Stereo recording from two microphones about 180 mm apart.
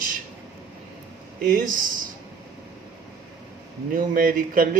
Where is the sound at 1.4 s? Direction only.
50° right (ahead or behind).